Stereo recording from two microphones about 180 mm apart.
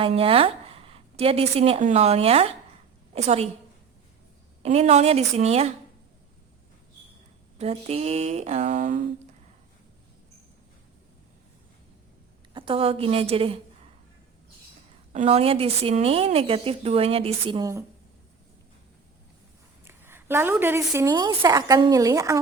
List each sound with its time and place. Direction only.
0.0 s a woman's voice: 30° right (ahead or behind)
4.6 s a woman's voice: 35° right (ahead or behind)
7.6 s a woman's voice: 35° right (ahead or behind)
12.5 s a woman's voice: 30° right (ahead or behind)
15.1 s a woman's voice: 35° right (ahead or behind); by 17.8 s 20° right (ahead or behind)
19.8 s a woman's voice: 15° right (ahead or behind)